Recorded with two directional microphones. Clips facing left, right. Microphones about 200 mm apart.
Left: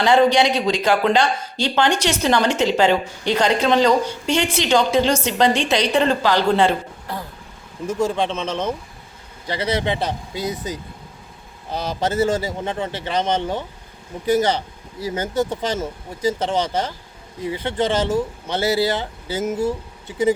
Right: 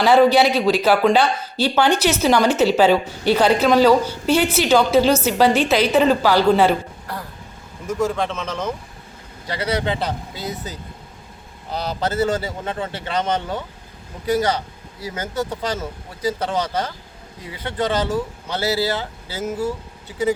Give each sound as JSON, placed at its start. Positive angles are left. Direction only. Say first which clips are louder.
{"t": 0.0, "sound": "a man's voice", "louder": "right 2 dB", "side_deg": -5}
{"t": 7.9, "sound": "speech", "louder": "left 1 dB", "side_deg": 30}
{"t": 11.9, "sound": "speech", "louder": "left 1 dB", "side_deg": 20}